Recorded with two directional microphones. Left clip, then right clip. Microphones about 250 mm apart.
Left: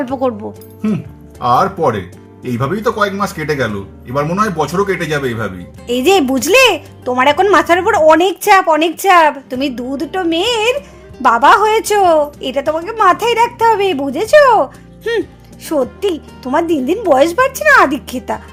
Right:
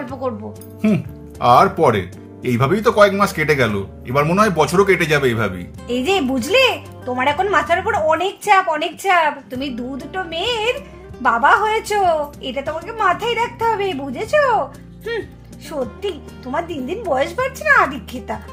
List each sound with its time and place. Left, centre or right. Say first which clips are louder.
0.0 s speech: left 8 dB; left
1.4 s speech: even; centre
5.9 s speech: left 7 dB; left